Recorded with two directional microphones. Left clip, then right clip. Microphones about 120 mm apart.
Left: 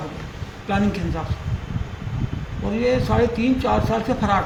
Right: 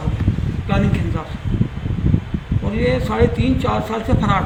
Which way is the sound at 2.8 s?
10° left (ahead or behind).